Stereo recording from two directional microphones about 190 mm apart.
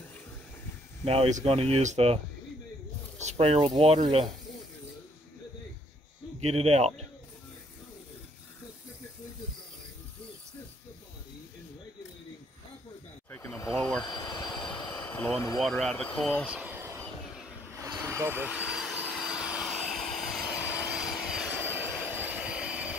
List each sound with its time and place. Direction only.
1.0 s speech: 30° right (ahead or behind)
3.3 s speech: 35° right (ahead or behind)
6.4 s speech: 30° right (ahead or behind)
13.3 s a sound: 15° left (ahead or behind)
14.0 s vehicle: 20° left (ahead or behind)
14.9 s vehicle: 10° left (ahead or behind)
15.6 s speech: centre (ahead or behind)
18.0 s vehicle: 15° right (ahead or behind)
20.4 s rub: 15° left (ahead or behind)
21.0 s vehicle: centre (ahead or behind)
22.2 s vacuum cleaner: 5° right (ahead or behind)